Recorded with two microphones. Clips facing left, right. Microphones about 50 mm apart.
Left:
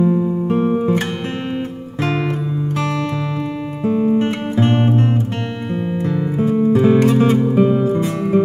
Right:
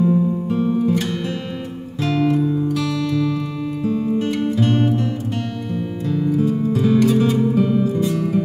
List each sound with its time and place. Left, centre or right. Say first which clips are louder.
0.0 s music: left 1 dB; left
0.5 s music: left 4 dB; left